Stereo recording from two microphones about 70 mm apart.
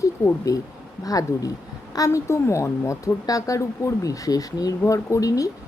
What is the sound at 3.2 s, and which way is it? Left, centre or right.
Speech, left.